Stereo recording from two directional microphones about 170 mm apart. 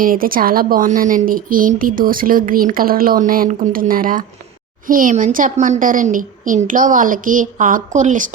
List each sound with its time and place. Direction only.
0.0 s a woman's voice: 55° right (ahead or behind)